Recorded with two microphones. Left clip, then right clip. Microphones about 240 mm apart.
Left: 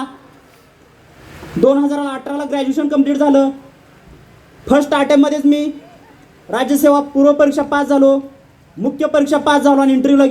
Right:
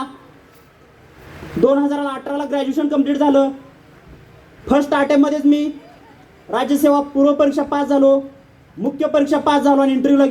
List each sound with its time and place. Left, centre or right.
1.6 s speech: left
4.6 s speech: left